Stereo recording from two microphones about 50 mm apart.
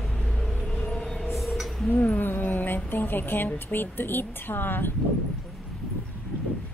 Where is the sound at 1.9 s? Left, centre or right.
Left.